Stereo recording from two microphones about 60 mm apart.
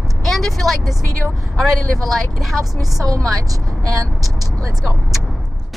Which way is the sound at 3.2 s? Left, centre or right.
Right.